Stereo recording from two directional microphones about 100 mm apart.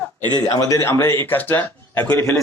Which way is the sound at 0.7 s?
25° left (ahead or behind).